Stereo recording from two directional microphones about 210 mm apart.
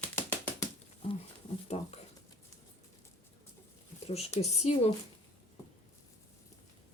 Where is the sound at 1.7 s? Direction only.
30° left (ahead or behind).